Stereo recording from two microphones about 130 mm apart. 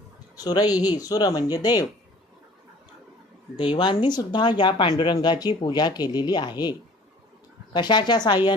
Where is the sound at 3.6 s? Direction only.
40° left (ahead or behind).